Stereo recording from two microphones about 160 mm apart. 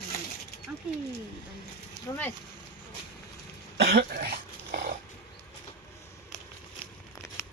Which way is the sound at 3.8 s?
75° right (ahead or behind).